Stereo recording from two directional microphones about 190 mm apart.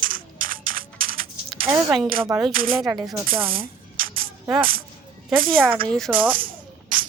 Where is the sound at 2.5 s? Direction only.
50° right (ahead or behind).